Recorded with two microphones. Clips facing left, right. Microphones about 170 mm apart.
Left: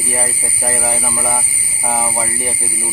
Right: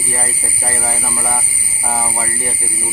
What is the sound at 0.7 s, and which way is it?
Speech, 15° left (ahead or behind).